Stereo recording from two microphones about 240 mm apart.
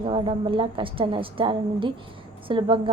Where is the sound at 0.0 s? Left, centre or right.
Right.